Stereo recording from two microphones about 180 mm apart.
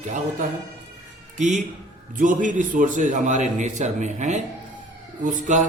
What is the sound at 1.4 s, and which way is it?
A man's voice, 40° right (ahead or behind).